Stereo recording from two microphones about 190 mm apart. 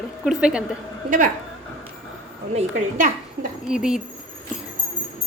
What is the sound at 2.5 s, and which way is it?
Speech, 45° right (ahead or behind).